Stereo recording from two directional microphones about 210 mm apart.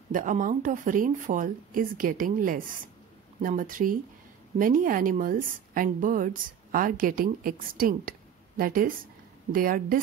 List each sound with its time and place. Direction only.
0.1 s a woman's voice: 40° right (ahead or behind)